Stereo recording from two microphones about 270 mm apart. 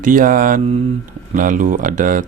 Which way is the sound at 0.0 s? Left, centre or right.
Right.